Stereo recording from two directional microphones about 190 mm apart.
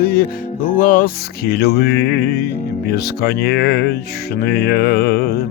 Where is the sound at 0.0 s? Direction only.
55° left (ahead or behind).